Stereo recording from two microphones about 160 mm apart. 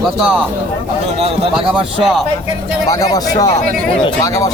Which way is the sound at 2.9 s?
25° left (ahead or behind).